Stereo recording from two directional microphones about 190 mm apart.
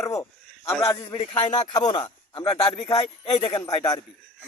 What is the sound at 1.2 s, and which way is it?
Speech, 25° left (ahead or behind).